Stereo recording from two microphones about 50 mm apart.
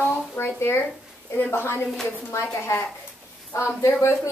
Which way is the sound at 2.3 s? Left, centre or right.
Left.